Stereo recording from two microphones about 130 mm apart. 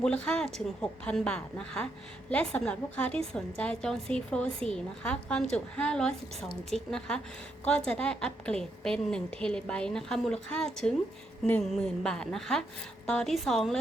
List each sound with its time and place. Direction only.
0.0 s a woman's voice: 5° left (ahead or behind)